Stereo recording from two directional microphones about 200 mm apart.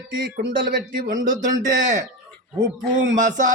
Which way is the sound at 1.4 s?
40° right (ahead or behind).